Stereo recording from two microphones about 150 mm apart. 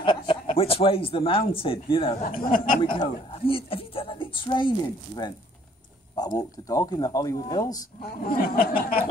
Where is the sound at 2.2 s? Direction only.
75° left (ahead or behind).